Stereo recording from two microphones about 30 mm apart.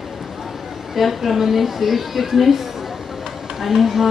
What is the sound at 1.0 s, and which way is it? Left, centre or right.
A woman's voice, centre.